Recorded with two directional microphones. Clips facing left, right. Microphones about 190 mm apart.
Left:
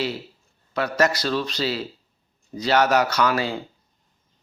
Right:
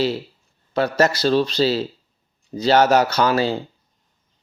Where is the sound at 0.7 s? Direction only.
30° right (ahead or behind).